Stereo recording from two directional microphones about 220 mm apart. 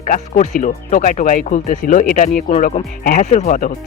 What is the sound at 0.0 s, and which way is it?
Speech, 35° left (ahead or behind).